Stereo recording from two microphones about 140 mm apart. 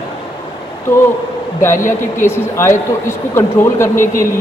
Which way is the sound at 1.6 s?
20° left (ahead or behind).